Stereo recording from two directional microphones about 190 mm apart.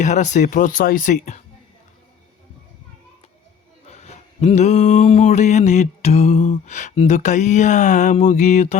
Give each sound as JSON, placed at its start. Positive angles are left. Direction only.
{"t": 0.0, "sound": "mantra", "side_deg": 40}
{"t": 3.8, "sound": "mantra", "side_deg": 35}